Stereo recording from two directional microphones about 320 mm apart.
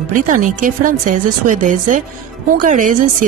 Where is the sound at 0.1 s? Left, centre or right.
Right.